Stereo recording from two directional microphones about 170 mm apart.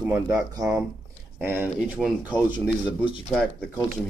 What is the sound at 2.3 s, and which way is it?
Speech, 30° left (ahead or behind).